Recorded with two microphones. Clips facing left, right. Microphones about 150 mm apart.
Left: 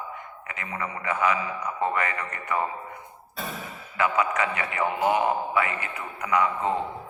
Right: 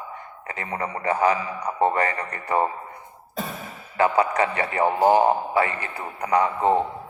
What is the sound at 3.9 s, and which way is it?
A man's voice, 35° right (ahead or behind).